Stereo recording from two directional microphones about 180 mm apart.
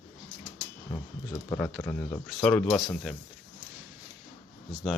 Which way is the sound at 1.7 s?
10° left (ahead or behind).